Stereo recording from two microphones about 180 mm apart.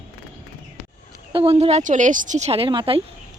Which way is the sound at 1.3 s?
30° right (ahead or behind).